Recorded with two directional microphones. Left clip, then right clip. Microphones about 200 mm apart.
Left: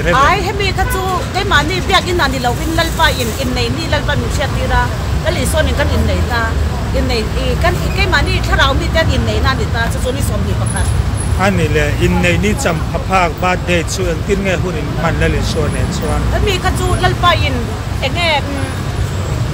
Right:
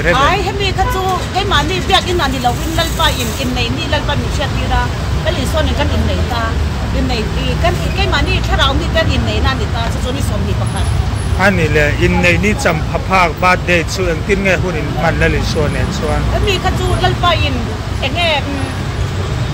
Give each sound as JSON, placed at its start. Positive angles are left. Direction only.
{"t": 0.1, "sound": "vehicle", "side_deg": 15}
{"t": 1.3, "sound": "speech", "side_deg": 15}
{"t": 7.6, "sound": "speech", "side_deg": 20}
{"t": 11.3, "sound": "speech", "side_deg": -5}
{"t": 16.4, "sound": "speech", "side_deg": 20}